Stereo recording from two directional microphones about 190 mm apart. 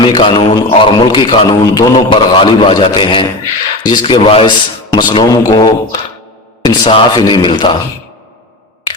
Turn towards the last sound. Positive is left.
turn(degrees=25)  # may be behind; listen again after turning